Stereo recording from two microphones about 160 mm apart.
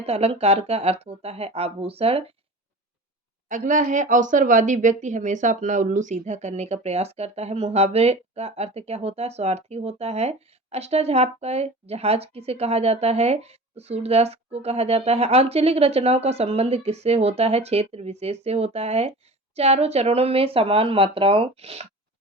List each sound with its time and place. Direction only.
0.0 s speech: 40° right (ahead or behind)
3.5 s speech: 55° right (ahead or behind)